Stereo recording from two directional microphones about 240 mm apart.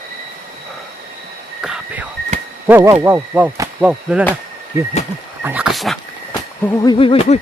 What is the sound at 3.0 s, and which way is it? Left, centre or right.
Insect, centre.